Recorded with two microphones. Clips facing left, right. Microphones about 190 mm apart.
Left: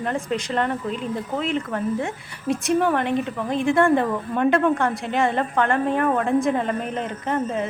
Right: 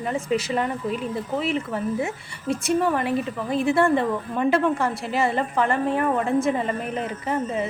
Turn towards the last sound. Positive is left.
turn(degrees=0)  # may be behind; listen again after turning